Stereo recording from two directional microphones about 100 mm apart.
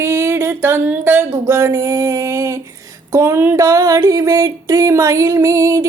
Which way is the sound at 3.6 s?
35° right (ahead or behind).